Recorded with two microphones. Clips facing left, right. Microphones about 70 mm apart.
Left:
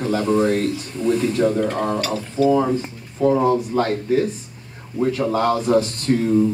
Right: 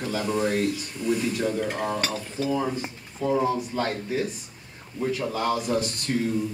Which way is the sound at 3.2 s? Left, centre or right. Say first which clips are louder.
Left 7 dB; left.